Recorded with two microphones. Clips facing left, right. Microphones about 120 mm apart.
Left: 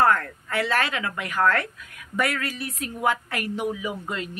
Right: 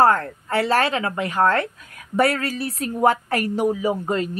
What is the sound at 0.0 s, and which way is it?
A woman's voice, 30° right (ahead or behind).